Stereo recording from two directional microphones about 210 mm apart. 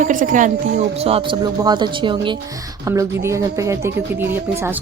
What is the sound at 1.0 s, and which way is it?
Speech, 25° right (ahead or behind).